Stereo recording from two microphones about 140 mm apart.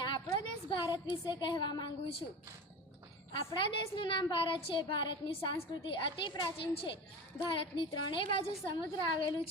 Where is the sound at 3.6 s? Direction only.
35° left (ahead or behind).